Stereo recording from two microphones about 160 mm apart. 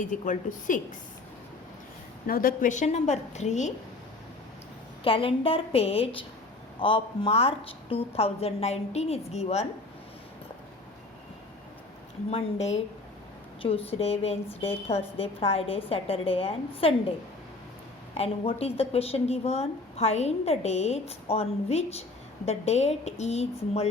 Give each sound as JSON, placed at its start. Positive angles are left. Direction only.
{"t": 0.0, "sound": "a woman's voice", "side_deg": 55}
{"t": 2.2, "sound": "a woman's voice", "side_deg": 65}
{"t": 5.0, "sound": "a woman's voice", "side_deg": 35}
{"t": 12.3, "sound": "a woman's voice", "side_deg": 40}
{"t": 18.2, "sound": "a woman's voice", "side_deg": 40}